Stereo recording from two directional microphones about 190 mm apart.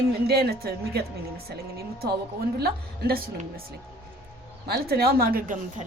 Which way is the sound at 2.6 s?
55° right (ahead or behind).